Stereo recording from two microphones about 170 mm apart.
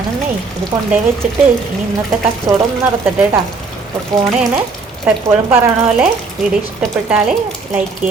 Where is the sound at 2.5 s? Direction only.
20° right (ahead or behind).